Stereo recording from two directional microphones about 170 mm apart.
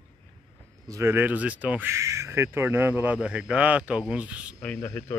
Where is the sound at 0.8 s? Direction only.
15° right (ahead or behind).